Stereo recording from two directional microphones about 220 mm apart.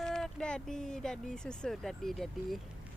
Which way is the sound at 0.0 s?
Centre (ahead or behind).